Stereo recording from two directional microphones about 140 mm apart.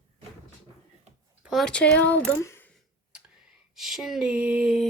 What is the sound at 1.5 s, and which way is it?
Speech, 5° left (ahead or behind).